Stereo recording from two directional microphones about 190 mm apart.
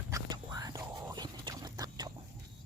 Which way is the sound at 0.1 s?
20° right (ahead or behind).